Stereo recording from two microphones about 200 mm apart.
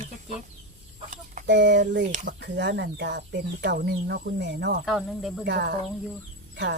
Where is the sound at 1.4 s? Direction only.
60° right (ahead or behind).